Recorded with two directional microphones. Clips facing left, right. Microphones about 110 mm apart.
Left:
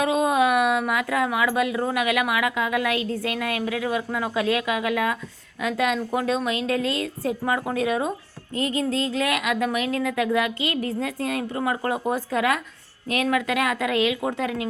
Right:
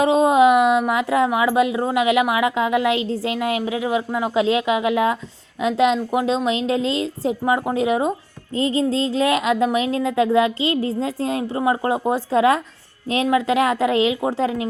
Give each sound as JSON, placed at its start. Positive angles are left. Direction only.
{"t": 0.0, "sound": "a woman's voice", "side_deg": -25}